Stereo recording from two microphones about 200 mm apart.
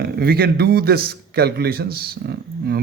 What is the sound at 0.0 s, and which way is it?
A man's voice, 50° right (ahead or behind).